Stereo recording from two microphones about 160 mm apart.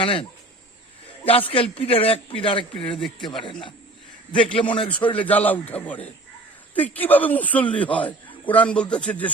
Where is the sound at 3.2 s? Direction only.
30° left (ahead or behind).